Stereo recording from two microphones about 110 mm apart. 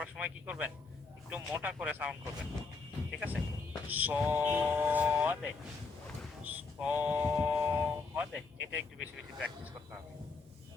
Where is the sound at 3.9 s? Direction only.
15° right (ahead or behind).